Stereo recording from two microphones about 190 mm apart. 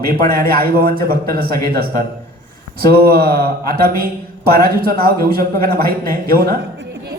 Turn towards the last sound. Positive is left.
turn(degrees=-60)  # may be behind; listen again after turning